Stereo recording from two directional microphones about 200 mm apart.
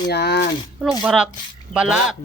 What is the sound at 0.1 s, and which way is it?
Speech, 55° left (ahead or behind).